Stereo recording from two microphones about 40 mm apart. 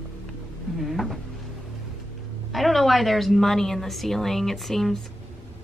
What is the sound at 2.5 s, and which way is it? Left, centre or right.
A woman's voice, centre.